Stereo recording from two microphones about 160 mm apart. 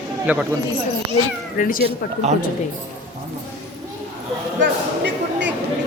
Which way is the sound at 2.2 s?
45° right (ahead or behind).